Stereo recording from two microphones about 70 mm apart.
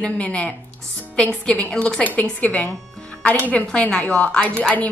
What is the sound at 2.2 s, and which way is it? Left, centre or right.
A woman's voice, left.